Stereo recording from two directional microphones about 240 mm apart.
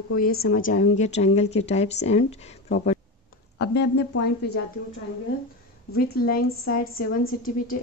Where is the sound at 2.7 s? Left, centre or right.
Left.